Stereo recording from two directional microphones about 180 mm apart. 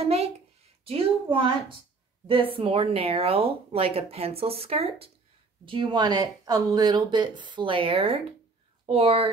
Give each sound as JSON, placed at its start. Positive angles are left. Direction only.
{"t": 0.8, "sound": "speech", "side_deg": -30}
{"t": 2.5, "sound": "speech", "side_deg": -30}